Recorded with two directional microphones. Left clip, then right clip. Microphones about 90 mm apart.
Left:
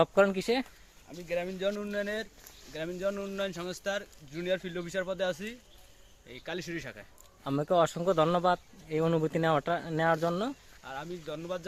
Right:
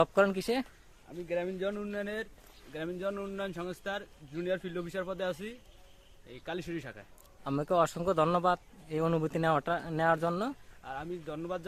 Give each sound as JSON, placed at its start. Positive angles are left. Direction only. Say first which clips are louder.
{"t": 0.0, "sound": "a man's voice", "louder": "left 2 dB", "side_deg": 10}
{"t": 1.3, "sound": "speech", "louder": "left 2 dB", "side_deg": -15}
{"t": 4.0, "sound": "speech", "louder": "even", "side_deg": -25}
{"t": 7.4, "sound": "a man's voice", "louder": "left 2 dB", "side_deg": 15}
{"t": 10.8, "sound": "speech", "louder": "even", "side_deg": -30}